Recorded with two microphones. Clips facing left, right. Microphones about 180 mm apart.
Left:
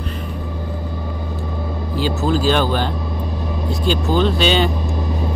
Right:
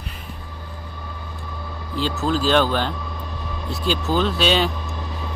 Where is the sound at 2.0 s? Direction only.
5° left (ahead or behind).